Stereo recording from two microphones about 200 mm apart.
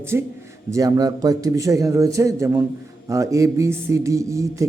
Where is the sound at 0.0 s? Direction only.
10° right (ahead or behind).